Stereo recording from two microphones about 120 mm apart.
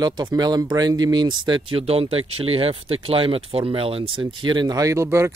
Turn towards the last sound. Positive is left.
turn(degrees=-20)  # may be behind; listen again after turning